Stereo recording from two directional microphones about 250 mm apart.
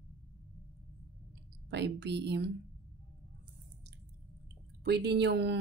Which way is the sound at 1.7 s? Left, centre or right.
Right.